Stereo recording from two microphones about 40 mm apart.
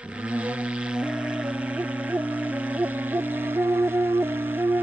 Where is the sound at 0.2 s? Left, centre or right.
Right.